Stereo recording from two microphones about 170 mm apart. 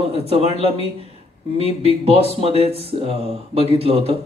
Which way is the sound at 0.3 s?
35° right (ahead or behind).